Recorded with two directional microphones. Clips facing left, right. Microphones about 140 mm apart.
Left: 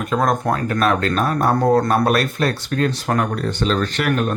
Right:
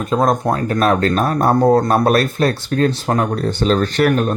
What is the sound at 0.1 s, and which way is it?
Speech, 25° right (ahead or behind).